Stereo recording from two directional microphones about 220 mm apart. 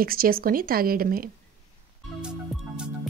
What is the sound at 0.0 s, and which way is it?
Speech, 40° right (ahead or behind).